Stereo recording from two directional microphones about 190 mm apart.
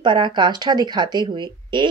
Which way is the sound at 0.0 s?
25° right (ahead or behind).